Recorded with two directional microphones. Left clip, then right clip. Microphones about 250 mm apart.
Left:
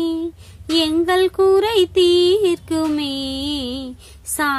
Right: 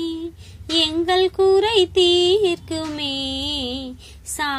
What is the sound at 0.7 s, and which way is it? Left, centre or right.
Female singing, left.